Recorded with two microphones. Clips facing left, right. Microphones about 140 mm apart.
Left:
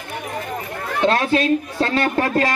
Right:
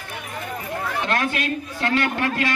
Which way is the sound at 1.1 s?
30° left (ahead or behind).